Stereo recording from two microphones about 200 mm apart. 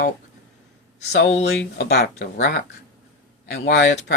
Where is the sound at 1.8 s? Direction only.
55° left (ahead or behind).